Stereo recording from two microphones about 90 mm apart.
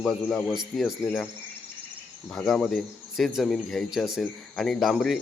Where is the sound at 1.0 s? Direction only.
20° left (ahead or behind).